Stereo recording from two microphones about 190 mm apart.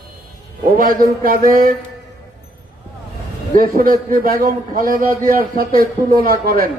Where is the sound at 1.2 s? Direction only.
50° right (ahead or behind).